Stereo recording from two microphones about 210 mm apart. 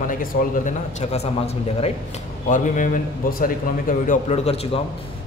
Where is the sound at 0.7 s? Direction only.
30° left (ahead or behind).